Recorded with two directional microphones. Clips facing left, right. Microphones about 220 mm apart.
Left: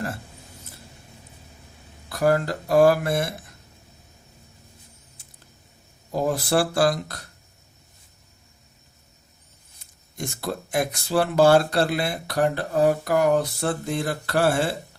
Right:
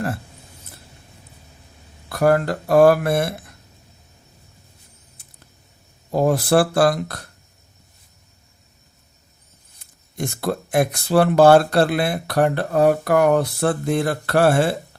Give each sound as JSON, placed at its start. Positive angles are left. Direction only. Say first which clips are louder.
{"t": 2.0, "sound": "speech", "louder": "right 4 dB", "side_deg": -60}
{"t": 6.1, "sound": "speech", "louder": "right 6 dB", "side_deg": -60}
{"t": 10.2, "sound": "speech", "louder": "right 6 dB", "side_deg": -55}